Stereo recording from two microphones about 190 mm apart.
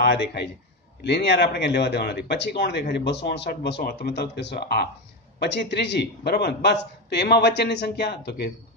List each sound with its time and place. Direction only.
0.0 s a man's voice: 60° left (ahead or behind)